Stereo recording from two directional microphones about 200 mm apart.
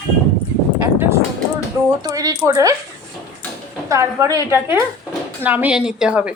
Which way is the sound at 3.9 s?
15° right (ahead or behind).